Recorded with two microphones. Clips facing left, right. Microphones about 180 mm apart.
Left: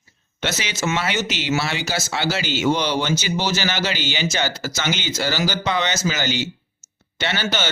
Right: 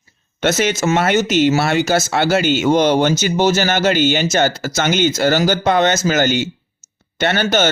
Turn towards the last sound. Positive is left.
turn(degrees=-50)  # may be behind; listen again after turning